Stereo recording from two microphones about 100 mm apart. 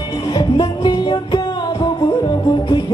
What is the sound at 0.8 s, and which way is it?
Music, 50° left (ahead or behind).